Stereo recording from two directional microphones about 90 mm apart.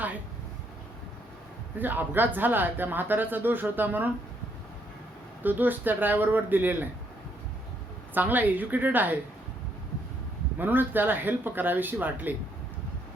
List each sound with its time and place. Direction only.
1.8 s speech: 20° right (ahead or behind)
5.4 s speech: 20° right (ahead or behind)
8.1 s speech: 20° right (ahead or behind)
10.6 s speech: 20° right (ahead or behind)